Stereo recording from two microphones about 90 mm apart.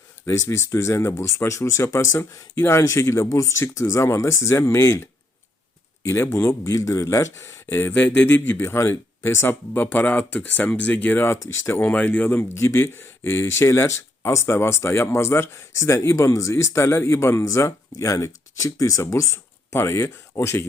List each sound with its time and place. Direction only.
0.3 s speech: 30° left (ahead or behind)
6.3 s speech: 30° left (ahead or behind)